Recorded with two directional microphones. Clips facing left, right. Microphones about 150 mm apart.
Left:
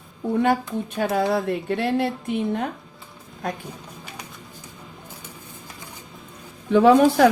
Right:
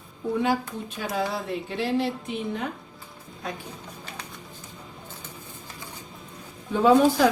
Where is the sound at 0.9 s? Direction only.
60° left (ahead or behind).